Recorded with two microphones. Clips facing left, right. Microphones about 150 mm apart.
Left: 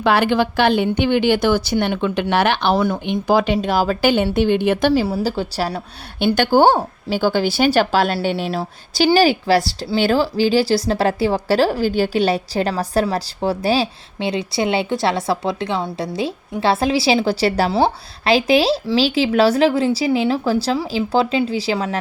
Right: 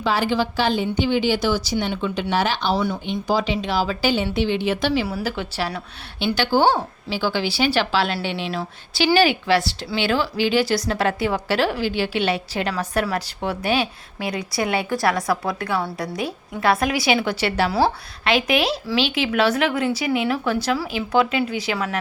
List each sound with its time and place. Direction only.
0.0 s speech: 65° left (ahead or behind); by 5.0 s 45° left (ahead or behind)
5.0 s a woman's voice: 30° left (ahead or behind)